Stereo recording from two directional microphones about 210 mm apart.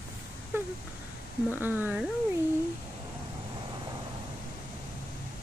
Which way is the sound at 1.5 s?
10° right (ahead or behind).